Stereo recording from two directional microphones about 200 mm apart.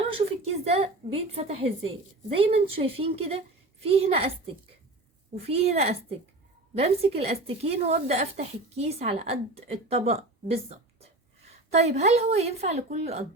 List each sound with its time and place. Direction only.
0.1 s a woman's voice: 30° right (ahead or behind)
5.5 s a woman's voice: 30° right (ahead or behind)